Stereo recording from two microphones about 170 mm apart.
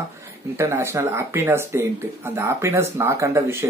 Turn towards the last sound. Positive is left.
turn(degrees=-15)  # may be behind; listen again after turning